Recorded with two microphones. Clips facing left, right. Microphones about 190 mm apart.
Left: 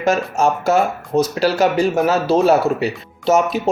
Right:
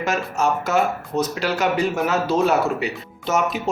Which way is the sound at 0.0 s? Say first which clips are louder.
Left 5 dB; 30° left (ahead or behind).